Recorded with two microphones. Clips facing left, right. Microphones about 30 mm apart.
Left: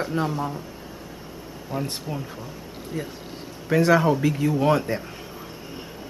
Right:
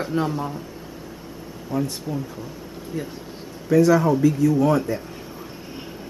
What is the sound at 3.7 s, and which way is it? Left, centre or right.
Speech, left.